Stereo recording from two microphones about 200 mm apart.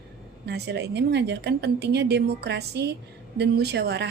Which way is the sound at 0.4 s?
55° right (ahead or behind).